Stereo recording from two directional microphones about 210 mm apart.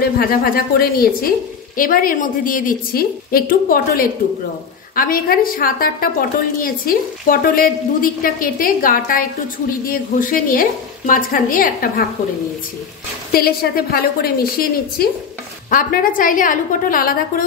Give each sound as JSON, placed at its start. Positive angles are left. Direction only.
{"t": 0.2, "sound": "a woman's voice", "side_deg": 45}
{"t": 13.3, "sound": "a woman's voice", "side_deg": 45}